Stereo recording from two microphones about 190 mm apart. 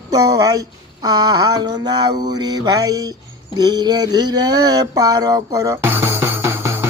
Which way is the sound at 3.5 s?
20° right (ahead or behind).